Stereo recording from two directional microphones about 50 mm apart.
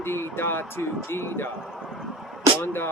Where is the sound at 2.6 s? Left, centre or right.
Left.